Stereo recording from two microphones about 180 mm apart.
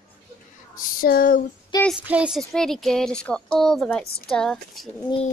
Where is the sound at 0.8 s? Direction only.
50° left (ahead or behind).